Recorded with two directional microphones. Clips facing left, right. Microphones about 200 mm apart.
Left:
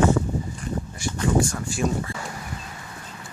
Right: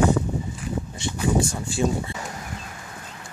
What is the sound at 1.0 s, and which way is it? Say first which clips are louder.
Speech: left 1 dB; 20° right (ahead or behind).